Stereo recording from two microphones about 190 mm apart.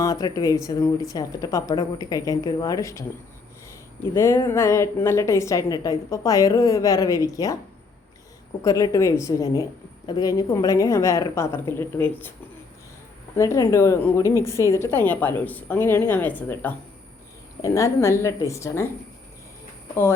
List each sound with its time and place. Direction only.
0.0 s speech: 20° left (ahead or behind)
4.1 s a woman's voice: 15° left (ahead or behind)
8.6 s a woman's voice: 15° left (ahead or behind)
13.3 s a woman's voice: 15° left (ahead or behind)
19.9 s a woman's voice: 15° left (ahead or behind)